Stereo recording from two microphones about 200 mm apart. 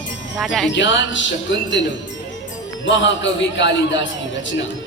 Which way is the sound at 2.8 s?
65° left (ahead or behind).